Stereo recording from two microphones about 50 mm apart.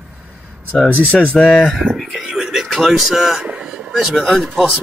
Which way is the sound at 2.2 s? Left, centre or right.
Centre.